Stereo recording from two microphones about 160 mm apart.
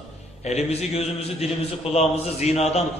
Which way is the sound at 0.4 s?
40° left (ahead or behind).